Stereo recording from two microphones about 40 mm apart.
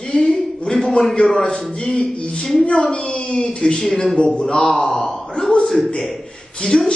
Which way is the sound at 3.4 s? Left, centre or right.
Centre.